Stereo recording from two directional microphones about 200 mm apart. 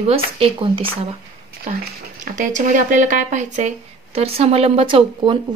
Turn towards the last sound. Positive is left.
turn(degrees=-25)  # may be behind; listen again after turning